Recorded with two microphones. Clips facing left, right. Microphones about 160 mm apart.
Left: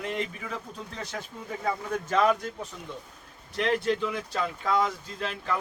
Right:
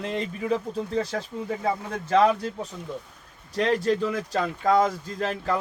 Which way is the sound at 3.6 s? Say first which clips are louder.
Right 3 dB; 40° right (ahead or behind).